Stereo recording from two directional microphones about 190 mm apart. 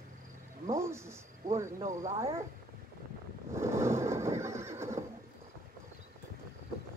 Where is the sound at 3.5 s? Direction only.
15° right (ahead or behind).